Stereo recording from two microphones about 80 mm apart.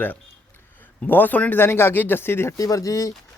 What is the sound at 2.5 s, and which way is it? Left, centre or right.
Speech, left.